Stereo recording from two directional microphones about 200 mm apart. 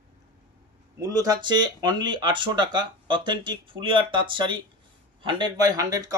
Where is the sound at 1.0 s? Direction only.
20° right (ahead or behind).